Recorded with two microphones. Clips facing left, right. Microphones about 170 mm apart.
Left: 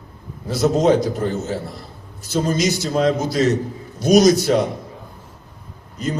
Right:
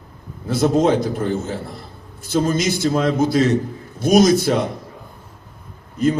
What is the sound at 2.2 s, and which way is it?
Speech, 50° right (ahead or behind).